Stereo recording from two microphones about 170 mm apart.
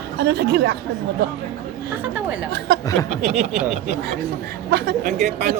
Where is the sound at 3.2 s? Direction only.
40° right (ahead or behind).